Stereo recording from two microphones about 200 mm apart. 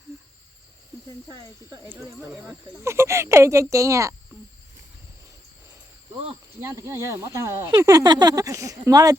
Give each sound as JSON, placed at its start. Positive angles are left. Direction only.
{"t": 0.1, "sound": "a sound", "side_deg": -15}
{"t": 1.7, "sound": "speech", "side_deg": -15}
{"t": 2.3, "sound": "speech", "side_deg": 0}
{"t": 2.8, "sound": "speech", "side_deg": -15}
{"t": 6.6, "sound": "speech", "side_deg": -15}